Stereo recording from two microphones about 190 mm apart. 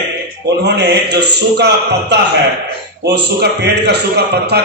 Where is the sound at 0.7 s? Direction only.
60° right (ahead or behind).